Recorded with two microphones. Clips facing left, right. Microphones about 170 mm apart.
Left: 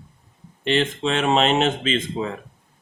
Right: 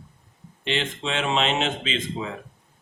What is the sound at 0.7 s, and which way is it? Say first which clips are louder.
Speech: left 6 dB; 45° left (ahead or behind).